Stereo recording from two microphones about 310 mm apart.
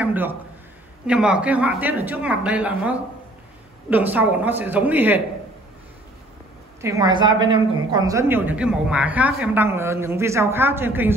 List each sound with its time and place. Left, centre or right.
0.0 s a man's voice: centre
6.8 s a woman's voice: centre